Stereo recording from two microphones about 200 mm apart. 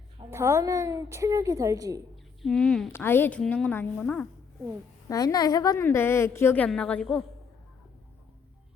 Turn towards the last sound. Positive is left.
turn(degrees=5)  # may be behind; listen again after turning